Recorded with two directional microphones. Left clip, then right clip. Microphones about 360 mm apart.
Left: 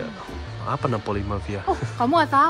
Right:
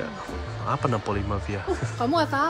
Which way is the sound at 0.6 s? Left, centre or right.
Centre.